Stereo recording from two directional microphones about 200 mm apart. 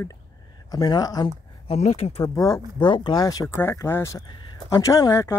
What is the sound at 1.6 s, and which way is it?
Speech, 30° left (ahead or behind).